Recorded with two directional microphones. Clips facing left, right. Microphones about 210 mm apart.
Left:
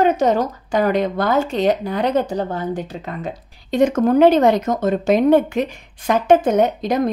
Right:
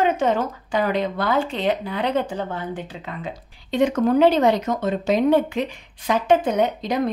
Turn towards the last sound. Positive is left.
turn(degrees=45)  # may be behind; listen again after turning